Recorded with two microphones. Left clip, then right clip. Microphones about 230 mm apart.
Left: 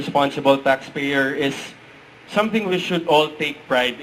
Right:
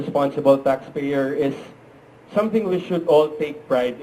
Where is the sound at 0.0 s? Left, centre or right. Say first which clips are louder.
Left 1 dB; centre.